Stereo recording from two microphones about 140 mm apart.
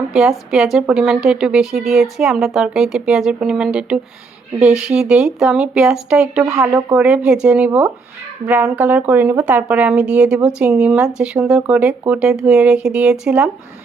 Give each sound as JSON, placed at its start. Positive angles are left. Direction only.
{"t": 0.1, "sound": "a woman's voice", "side_deg": -5}
{"t": 6.4, "sound": "speech", "side_deg": -25}
{"t": 6.9, "sound": "speech", "side_deg": -10}